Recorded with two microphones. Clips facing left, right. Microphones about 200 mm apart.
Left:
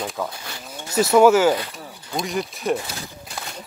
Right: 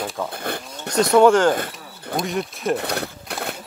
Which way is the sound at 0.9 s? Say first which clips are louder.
Even; 5° left (ahead or behind).